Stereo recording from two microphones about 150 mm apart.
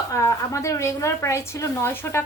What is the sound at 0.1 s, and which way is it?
A woman's voice, 20° left (ahead or behind).